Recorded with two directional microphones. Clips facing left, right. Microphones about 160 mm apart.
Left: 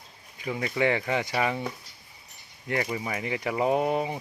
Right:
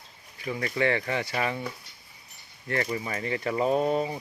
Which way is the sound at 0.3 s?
15° left (ahead or behind).